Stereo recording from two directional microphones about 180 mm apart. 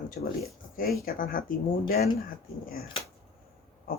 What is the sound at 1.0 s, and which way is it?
Speech, 50° left (ahead or behind).